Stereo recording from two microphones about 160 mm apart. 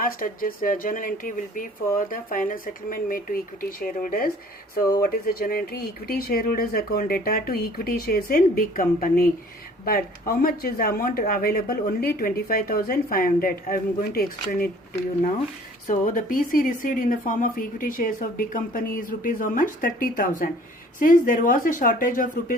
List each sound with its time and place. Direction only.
0.0 s speech: 60° left (ahead or behind)
15.9 s speech: 55° left (ahead or behind)